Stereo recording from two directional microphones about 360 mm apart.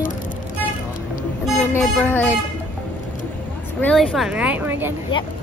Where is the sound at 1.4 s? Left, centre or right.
Centre.